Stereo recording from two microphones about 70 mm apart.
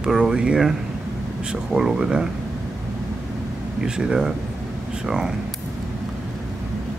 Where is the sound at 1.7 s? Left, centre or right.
Centre.